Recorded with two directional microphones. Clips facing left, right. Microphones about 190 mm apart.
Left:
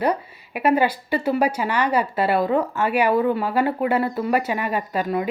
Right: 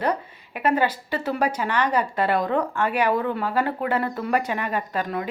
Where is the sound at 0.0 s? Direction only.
10° left (ahead or behind).